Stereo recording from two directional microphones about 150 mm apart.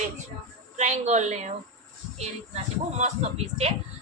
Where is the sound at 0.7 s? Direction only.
50° right (ahead or behind).